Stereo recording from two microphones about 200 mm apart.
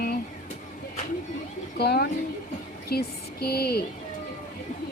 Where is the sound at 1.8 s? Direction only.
55° left (ahead or behind).